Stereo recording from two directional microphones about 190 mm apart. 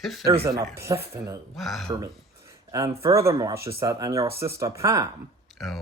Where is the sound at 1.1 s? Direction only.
15° right (ahead or behind).